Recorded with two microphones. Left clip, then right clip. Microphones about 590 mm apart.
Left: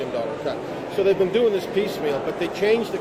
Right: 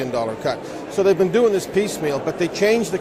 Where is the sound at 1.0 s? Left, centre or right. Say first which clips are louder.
Right 3 dB; right.